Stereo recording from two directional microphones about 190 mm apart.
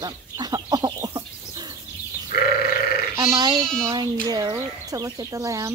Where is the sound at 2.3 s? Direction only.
50° left (ahead or behind).